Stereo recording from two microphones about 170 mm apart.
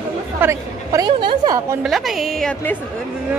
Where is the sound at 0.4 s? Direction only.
20° right (ahead or behind).